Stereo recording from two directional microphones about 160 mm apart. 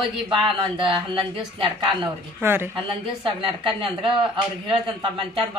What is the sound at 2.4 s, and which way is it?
Speech, 15° right (ahead or behind).